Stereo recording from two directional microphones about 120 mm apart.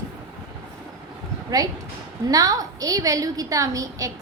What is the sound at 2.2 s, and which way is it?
A woman's voice, 30° right (ahead or behind).